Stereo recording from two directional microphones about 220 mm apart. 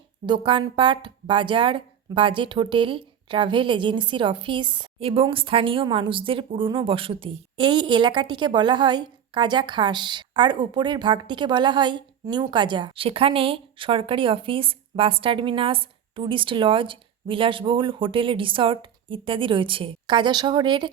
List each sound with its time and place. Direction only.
0.3 s a woman's voice: 20° right (ahead or behind)